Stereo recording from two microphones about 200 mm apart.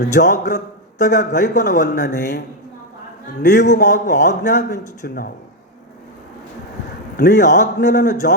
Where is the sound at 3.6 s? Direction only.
40° left (ahead or behind).